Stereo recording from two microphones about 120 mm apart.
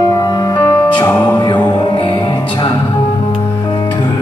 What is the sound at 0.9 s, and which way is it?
Music, 35° left (ahead or behind).